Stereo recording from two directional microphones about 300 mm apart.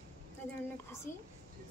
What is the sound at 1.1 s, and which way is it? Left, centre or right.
Speech, centre.